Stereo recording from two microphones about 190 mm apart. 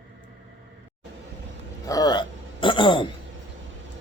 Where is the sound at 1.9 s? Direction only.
20° left (ahead or behind).